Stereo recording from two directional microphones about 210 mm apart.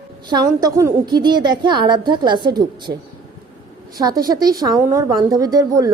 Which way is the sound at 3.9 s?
20° right (ahead or behind).